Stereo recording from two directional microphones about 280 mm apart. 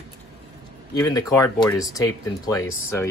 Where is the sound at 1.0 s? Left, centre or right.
Centre.